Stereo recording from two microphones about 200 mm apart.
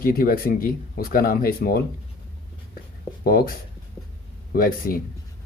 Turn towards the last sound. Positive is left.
turn(degrees=45)  # may be behind; listen again after turning